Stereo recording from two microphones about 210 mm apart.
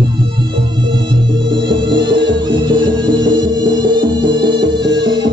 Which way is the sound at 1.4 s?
60° right (ahead or behind).